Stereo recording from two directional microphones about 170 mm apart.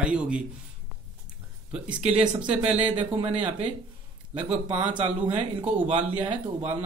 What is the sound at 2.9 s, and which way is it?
Speech, 30° right (ahead or behind).